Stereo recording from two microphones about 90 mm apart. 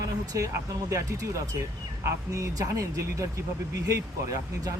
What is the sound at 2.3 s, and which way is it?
Speech, 40° right (ahead or behind).